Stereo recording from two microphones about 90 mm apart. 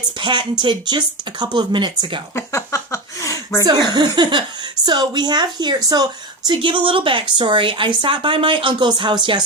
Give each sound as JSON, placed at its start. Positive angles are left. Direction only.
{"t": 0.2, "sound": "speech", "side_deg": -60}
{"t": 2.3, "sound": "a sound", "side_deg": 30}
{"t": 3.9, "sound": "a woman's voice", "side_deg": -55}
{"t": 6.5, "sound": "speech", "side_deg": -70}